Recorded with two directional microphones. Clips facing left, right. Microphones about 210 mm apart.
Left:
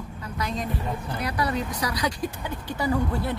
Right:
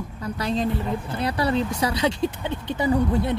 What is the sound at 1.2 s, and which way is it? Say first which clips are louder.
Speech: right 5 dB; 30° right (ahead or behind).